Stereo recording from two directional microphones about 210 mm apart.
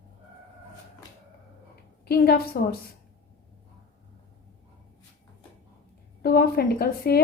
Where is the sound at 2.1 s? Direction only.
45° left (ahead or behind).